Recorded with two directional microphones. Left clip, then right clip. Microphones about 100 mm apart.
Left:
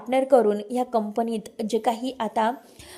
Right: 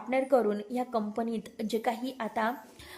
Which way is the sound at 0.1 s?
30° left (ahead or behind).